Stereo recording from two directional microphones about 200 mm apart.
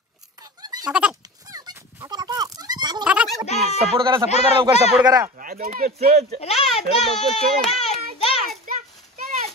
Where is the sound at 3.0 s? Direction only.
5° right (ahead or behind).